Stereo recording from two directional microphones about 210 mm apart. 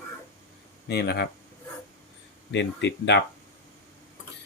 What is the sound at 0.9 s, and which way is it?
Speech, 50° left (ahead or behind).